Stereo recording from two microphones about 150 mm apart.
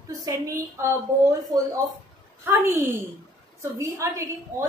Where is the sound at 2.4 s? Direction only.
15° right (ahead or behind).